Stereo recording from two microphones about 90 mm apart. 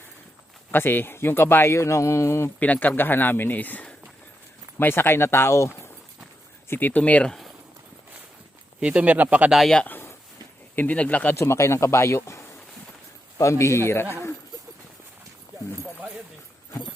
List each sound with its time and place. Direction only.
0.7 s speech: 25° left (ahead or behind)
2.6 s speech: 20° left (ahead or behind)
6.7 s speech: 20° left (ahead or behind)
8.8 s speech: 15° right (ahead or behind)
9.5 s speech: centre (ahead or behind)
9.8 s a sound: 25° left (ahead or behind)
10.8 s speech: 15° left (ahead or behind)
11.3 s speech: 30° left (ahead or behind)
13.4 s speech: 30° left (ahead or behind)